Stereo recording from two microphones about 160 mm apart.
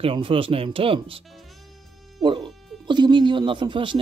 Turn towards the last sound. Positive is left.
turn(degrees=-30)  # may be behind; listen again after turning